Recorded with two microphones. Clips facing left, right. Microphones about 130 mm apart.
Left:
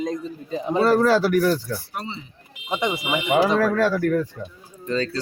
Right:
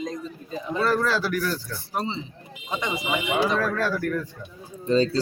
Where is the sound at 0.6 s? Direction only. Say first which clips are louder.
Left 6 dB; 35° left (ahead or behind).